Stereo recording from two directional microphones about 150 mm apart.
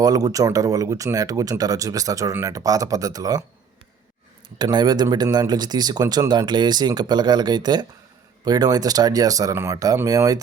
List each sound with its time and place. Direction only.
0.0 s speech: 25° right (ahead or behind)
4.5 s speech: 30° right (ahead or behind)